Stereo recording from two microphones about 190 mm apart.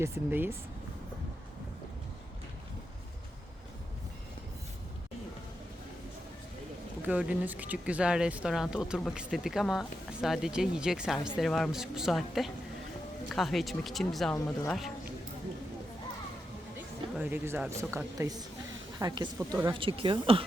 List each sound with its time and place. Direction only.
0.0 s speech: 10° right (ahead or behind)
7.0 s speech: 5° right (ahead or behind)
17.2 s a woman's voice: 10° right (ahead or behind); by 20.4 s 30° right (ahead or behind)